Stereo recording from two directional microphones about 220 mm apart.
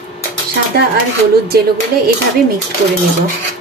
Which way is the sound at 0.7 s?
45° right (ahead or behind).